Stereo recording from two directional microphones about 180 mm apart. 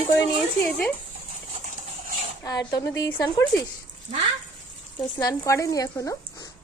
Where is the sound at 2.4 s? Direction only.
20° left (ahead or behind).